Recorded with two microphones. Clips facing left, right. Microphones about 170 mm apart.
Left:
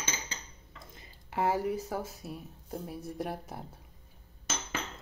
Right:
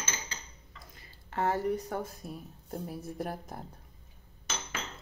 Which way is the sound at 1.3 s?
10° left (ahead or behind).